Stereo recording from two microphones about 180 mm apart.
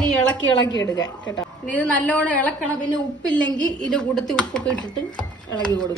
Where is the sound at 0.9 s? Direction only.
20° left (ahead or behind).